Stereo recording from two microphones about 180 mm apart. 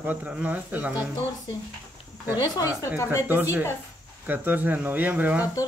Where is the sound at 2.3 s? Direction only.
20° left (ahead or behind).